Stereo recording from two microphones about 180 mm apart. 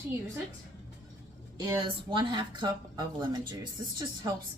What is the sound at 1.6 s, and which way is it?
Speech, 20° right (ahead or behind).